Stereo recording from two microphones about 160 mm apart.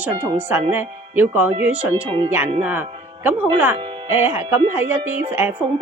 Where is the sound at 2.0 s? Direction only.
35° right (ahead or behind).